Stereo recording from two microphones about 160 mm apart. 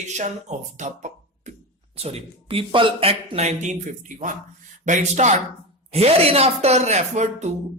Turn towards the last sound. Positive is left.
turn(degrees=-45)  # may be behind; listen again after turning